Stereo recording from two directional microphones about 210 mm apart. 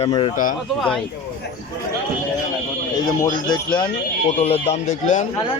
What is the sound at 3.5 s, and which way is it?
A man's voice, 20° left (ahead or behind).